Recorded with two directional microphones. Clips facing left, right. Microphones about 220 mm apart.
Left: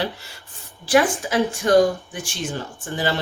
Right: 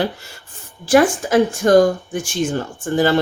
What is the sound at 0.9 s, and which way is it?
Speech, 45° right (ahead or behind).